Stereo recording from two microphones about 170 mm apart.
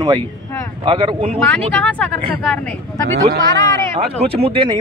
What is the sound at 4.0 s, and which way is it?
Speech, 35° right (ahead or behind).